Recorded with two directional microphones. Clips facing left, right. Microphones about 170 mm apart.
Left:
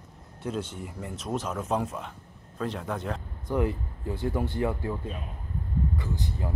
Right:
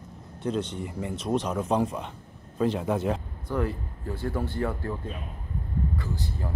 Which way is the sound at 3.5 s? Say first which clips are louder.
Left 1 dB; 15° left (ahead or behind).